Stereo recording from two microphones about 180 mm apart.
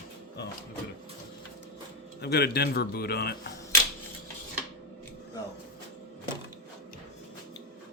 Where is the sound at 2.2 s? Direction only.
65° left (ahead or behind).